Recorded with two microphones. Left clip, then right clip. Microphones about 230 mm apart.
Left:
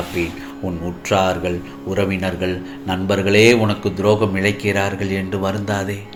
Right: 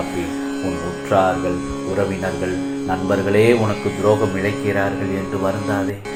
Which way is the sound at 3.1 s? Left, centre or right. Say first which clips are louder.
Left 2 dB; left.